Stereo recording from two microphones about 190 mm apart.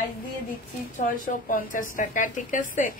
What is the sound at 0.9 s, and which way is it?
Speech, 45° left (ahead or behind).